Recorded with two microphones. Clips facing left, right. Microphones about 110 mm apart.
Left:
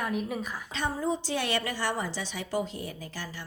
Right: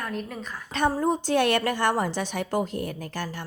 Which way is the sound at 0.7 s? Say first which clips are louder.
Right 7 dB; 50° right (ahead or behind).